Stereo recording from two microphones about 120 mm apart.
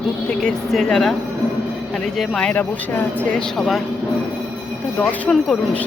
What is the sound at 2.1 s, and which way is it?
Speech, 5° left (ahead or behind).